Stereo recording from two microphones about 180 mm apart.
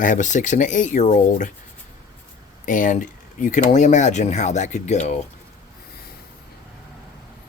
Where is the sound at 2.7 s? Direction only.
45° left (ahead or behind).